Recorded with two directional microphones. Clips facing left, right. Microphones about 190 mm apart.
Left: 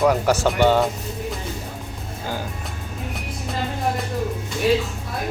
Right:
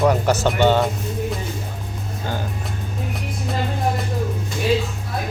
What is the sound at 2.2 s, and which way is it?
Music, 5° left (ahead or behind).